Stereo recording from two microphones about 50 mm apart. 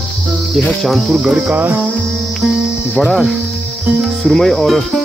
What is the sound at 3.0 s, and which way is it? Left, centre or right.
Cricket, centre.